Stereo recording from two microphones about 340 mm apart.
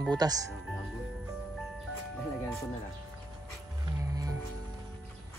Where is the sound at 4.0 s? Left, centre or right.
Centre.